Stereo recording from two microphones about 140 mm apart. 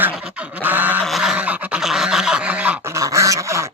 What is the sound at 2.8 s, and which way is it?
Dog, 20° right (ahead or behind).